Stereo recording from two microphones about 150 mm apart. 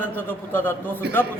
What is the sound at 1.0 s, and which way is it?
Speech, 90° right.